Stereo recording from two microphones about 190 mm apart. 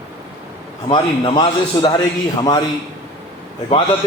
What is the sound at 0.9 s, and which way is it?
A man's voice, 25° left (ahead or behind).